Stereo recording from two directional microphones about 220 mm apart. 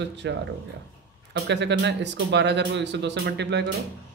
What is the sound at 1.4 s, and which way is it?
Speech, 50° right (ahead or behind).